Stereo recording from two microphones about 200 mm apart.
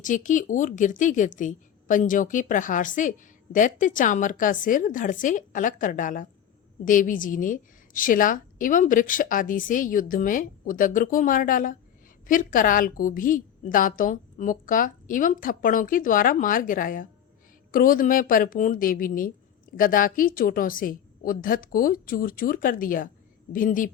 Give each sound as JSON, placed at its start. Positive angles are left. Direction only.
{"t": 0.0, "sound": "a woman's voice", "side_deg": 40}